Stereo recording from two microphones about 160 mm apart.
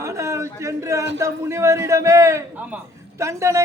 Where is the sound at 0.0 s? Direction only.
20° right (ahead or behind).